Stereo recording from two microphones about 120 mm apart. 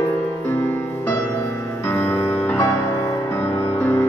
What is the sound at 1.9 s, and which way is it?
Music, 20° left (ahead or behind).